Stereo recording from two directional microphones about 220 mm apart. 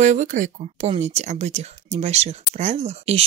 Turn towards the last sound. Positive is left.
turn(degrees=-30)  # may be behind; listen again after turning